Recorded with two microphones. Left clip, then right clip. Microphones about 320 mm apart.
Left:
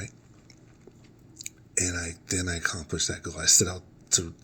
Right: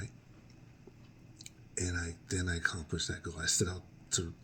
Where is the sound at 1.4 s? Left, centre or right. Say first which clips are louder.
Left 10 dB; centre.